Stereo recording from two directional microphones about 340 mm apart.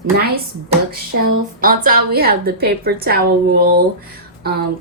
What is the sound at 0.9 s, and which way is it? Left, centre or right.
A woman's voice, right.